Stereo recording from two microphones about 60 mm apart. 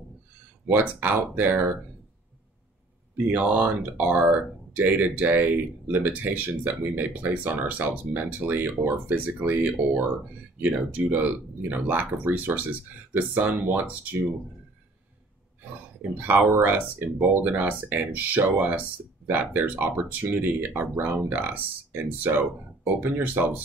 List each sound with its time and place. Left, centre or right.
0.7 s speech: right
3.3 s speech: right
16.0 s speech: right